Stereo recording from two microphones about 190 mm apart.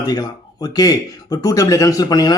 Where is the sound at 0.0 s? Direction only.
20° left (ahead or behind).